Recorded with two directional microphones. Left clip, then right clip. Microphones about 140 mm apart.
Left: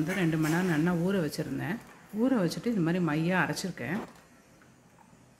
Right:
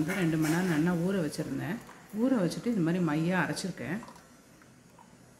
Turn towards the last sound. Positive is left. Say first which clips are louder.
# left 1 dB
turn(degrees=25)  # may be behind; listen again after turning